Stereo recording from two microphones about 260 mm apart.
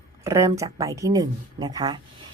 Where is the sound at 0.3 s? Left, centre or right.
Centre.